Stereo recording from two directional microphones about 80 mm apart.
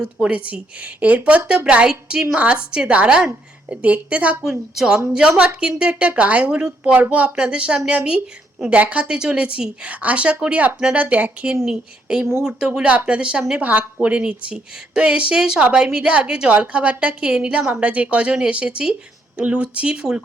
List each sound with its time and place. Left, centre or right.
0.0 s a woman's voice: centre
4.7 s a woman's voice: centre